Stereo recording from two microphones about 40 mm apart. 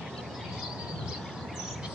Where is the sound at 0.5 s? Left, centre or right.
Centre.